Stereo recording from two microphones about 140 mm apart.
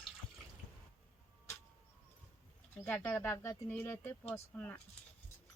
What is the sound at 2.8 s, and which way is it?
Speech, 10° left (ahead or behind).